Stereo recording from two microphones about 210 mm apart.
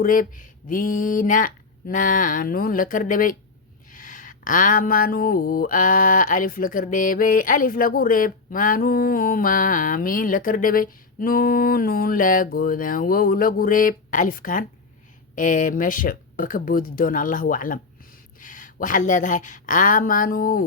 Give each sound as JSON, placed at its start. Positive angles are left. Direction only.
{"t": 0.0, "sound": "speech", "side_deg": 40}